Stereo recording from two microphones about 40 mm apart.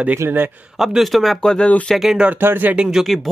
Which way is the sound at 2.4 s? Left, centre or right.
Right.